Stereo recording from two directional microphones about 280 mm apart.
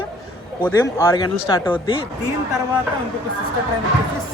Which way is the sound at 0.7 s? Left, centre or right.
Centre.